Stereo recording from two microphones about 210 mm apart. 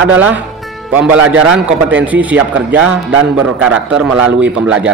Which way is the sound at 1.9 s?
5° right (ahead or behind).